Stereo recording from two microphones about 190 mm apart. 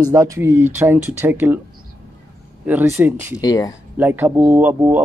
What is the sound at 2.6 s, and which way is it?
Speech, 10° right (ahead or behind).